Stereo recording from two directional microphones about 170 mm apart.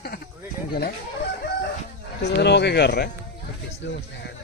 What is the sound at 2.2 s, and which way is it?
Speech, 80° left.